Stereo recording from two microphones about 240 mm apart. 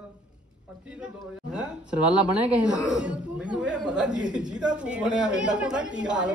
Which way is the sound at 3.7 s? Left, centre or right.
Centre.